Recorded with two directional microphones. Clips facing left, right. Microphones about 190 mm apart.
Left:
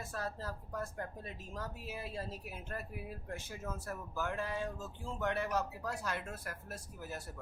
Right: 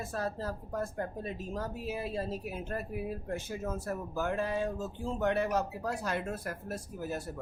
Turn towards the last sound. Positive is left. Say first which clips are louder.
# right 8 dB
turn(degrees=-20)  # may be behind; listen again after turning